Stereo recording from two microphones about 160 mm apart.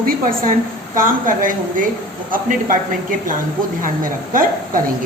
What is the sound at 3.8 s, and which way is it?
A woman's voice, 60° right (ahead or behind).